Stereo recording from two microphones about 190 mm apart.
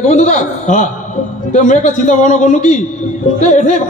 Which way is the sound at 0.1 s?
40° left (ahead or behind).